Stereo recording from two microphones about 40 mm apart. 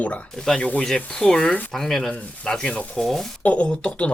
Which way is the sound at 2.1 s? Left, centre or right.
Left.